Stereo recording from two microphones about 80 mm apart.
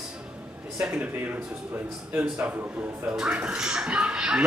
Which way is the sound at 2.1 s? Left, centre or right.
Centre.